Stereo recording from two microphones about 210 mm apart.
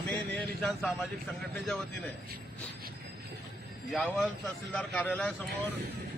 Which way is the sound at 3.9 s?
Centre (ahead or behind).